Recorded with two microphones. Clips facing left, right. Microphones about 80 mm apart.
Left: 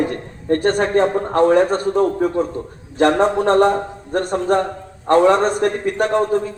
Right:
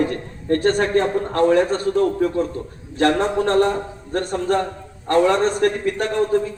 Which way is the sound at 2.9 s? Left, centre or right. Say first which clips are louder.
Left 3 dB; left.